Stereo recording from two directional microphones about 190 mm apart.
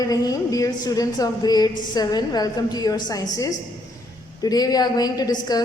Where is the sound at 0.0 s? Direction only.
20° left (ahead or behind).